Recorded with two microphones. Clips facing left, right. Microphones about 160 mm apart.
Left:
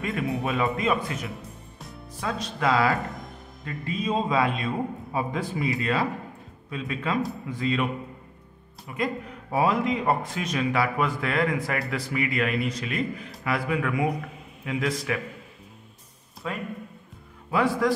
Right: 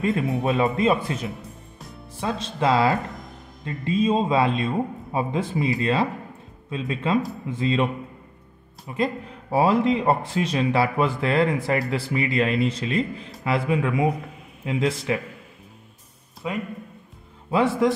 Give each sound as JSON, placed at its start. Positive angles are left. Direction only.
{"t": 0.0, "sound": "speech", "side_deg": -25}
{"t": 1.3, "sound": "music", "side_deg": 0}
{"t": 2.1, "sound": "speech", "side_deg": -25}
{"t": 16.4, "sound": "speech", "side_deg": -15}